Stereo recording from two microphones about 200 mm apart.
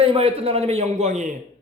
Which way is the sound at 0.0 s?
30° right (ahead or behind).